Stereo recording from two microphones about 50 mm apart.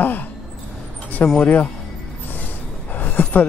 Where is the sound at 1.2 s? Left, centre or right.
Left.